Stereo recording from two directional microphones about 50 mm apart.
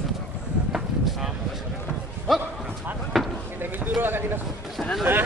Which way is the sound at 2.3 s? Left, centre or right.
Centre.